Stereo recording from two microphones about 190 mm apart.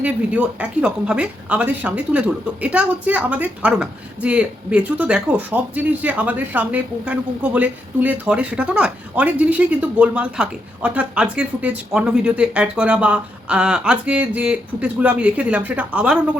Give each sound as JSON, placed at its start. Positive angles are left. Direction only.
{"t": 0.0, "sound": "a woman's voice", "side_deg": -5}